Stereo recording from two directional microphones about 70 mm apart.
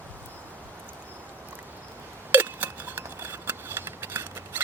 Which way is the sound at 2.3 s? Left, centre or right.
Right.